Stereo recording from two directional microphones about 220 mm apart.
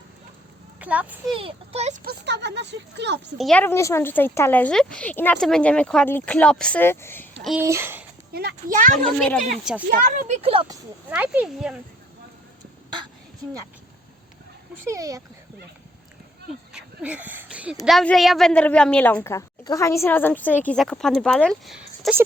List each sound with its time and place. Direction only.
0.8 s a child's voice: 5° right (ahead or behind)
1.3 s a woman's voice: 25° right (ahead or behind)
2.0 s speech: 50° right (ahead or behind)
3.3 s speech: 5° left (ahead or behind)
7.6 s speech: 10° right (ahead or behind)
8.3 s speech: 45° right (ahead or behind)
9.0 s a woman's voice: 5° left (ahead or behind)
9.9 s a woman's voice: 30° right (ahead or behind)
11.1 s a woman's voice: 5° right (ahead or behind)
14.8 s speech: 15° right (ahead or behind)
16.7 s a sound: 5° right (ahead or behind)
17.8 s a woman's voice: centre (ahead or behind)